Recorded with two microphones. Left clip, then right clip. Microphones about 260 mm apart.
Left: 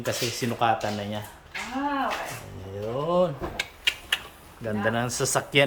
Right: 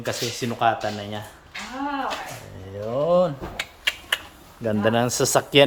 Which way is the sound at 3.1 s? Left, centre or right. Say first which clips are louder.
Right 3 dB; centre.